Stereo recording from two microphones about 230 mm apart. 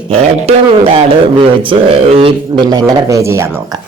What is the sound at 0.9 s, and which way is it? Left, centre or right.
A man's voice, right.